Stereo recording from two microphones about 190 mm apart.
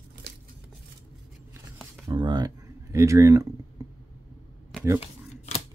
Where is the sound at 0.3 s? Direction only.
60° right (ahead or behind).